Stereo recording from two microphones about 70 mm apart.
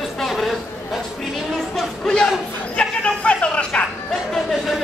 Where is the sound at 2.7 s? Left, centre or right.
Centre.